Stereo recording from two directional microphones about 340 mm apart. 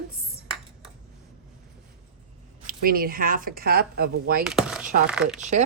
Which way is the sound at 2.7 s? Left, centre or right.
Right.